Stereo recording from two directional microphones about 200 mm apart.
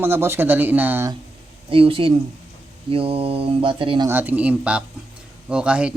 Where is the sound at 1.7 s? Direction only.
25° right (ahead or behind).